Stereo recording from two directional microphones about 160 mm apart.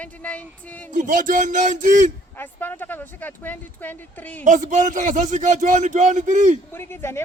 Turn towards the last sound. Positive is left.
turn(degrees=15)  # may be behind; listen again after turning